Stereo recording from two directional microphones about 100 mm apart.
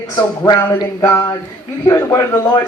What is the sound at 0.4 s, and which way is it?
Speech, 45° left (ahead or behind).